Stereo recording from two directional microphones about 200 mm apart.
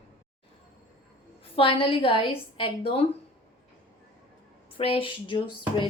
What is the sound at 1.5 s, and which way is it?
A woman's voice, 25° left (ahead or behind).